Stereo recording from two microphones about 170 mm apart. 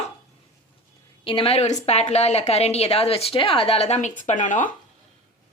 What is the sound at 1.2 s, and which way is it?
A woman's voice, 30° left (ahead or behind).